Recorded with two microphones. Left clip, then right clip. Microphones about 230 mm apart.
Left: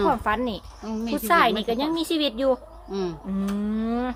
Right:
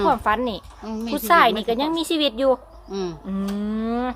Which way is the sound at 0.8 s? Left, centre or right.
Centre.